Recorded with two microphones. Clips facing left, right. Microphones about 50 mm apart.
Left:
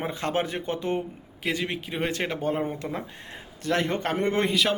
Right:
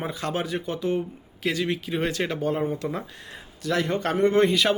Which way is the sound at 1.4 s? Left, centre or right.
Left.